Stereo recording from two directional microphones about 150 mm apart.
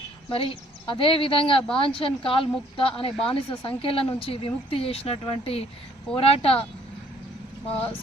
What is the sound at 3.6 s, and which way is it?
Speech, 35° left (ahead or behind).